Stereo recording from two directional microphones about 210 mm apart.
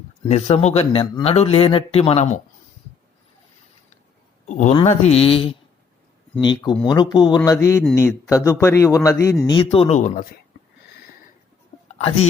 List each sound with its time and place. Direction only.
0.3 s a man's voice: 30° left (ahead or behind)
4.4 s a man's voice: 35° left (ahead or behind); by 9.3 s 15° left (ahead or behind)
9.5 s a man's voice: 25° left (ahead or behind)
11.9 s speech: 30° left (ahead or behind)